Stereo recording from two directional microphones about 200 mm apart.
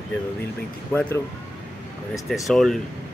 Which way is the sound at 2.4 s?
Centre (ahead or behind).